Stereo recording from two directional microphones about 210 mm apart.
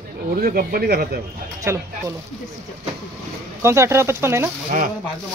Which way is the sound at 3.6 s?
15° right (ahead or behind).